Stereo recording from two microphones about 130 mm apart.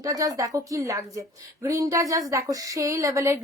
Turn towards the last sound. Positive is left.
turn(degrees=-20)  # may be behind; listen again after turning